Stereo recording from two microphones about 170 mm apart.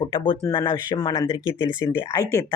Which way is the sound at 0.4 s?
25° left (ahead or behind).